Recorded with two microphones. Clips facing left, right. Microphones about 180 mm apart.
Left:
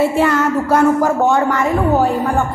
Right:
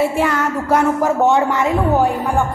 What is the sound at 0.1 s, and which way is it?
Speech, 10° right (ahead or behind).